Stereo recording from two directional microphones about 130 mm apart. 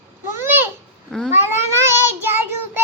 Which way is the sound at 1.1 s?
5° left (ahead or behind).